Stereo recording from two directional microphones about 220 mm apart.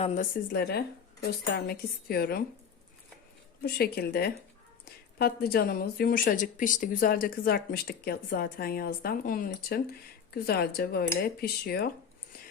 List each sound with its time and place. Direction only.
0.0 s a woman's voice: 35° left (ahead or behind)
3.6 s a woman's voice: 45° left (ahead or behind)